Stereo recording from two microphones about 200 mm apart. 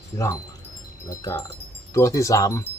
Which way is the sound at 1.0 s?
15° left (ahead or behind).